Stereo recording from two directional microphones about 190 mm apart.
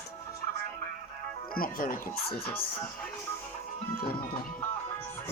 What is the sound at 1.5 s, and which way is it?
Speech, 50° left (ahead or behind).